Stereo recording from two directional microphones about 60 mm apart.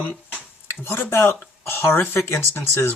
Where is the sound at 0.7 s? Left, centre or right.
Left.